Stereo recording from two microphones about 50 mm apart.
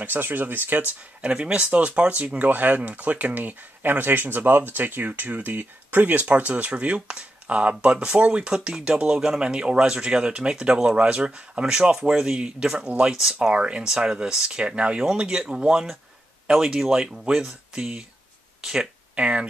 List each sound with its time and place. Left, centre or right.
0.0 s speech: right
1.2 s speech: right
13.2 s speech: centre
13.5 s speech: right
19.1 s speech: right